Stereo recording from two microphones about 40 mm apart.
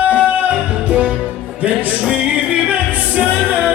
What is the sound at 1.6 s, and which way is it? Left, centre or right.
Music, right.